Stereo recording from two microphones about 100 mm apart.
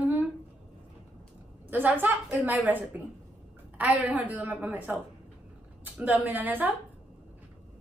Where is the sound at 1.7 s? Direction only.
15° right (ahead or behind).